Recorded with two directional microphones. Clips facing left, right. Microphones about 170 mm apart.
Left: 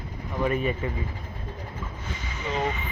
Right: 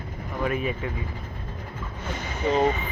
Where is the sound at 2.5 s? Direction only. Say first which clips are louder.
Right 7 dB; 35° right (ahead or behind).